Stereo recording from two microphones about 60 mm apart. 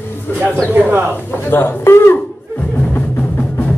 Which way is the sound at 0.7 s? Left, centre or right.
Right.